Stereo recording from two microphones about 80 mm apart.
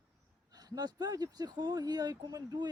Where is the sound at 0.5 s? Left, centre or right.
Right.